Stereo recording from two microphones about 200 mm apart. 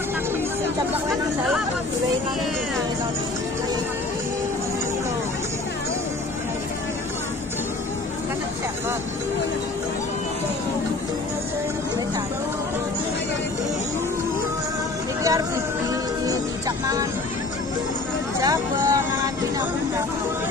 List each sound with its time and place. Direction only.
15.2 s music: 15° right (ahead or behind)
18.4 s vehicle: 20° right (ahead or behind)